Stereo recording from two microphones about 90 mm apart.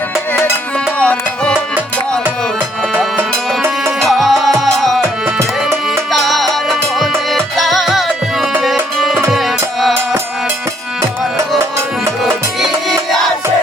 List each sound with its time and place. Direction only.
0.9 s music: 15° left (ahead or behind)
3.2 s music: 25° right (ahead or behind)
4.0 s music: centre (ahead or behind)
6.1 s music: centre (ahead or behind)
12.2 s music: centre (ahead or behind)